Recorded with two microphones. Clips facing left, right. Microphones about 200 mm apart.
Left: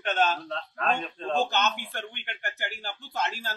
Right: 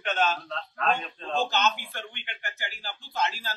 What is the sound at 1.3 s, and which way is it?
Speech, 45° left (ahead or behind).